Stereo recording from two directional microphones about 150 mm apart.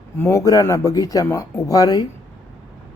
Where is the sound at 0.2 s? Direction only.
20° left (ahead or behind).